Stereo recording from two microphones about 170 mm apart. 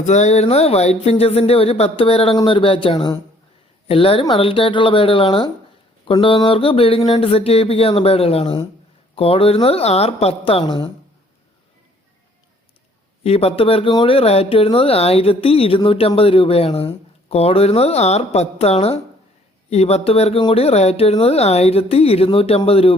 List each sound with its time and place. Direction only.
0.0 s speech: 45° left (ahead or behind)
13.2 s speech: 35° left (ahead or behind)